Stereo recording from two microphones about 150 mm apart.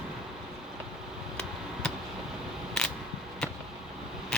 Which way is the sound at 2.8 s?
5° left (ahead or behind).